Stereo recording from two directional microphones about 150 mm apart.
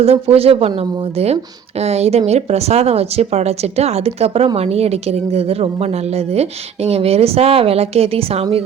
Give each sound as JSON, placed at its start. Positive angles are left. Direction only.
{"t": 0.0, "sound": "speech", "side_deg": -40}